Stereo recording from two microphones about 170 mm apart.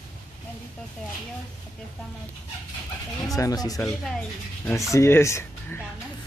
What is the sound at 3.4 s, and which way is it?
Speech, 20° left (ahead or behind).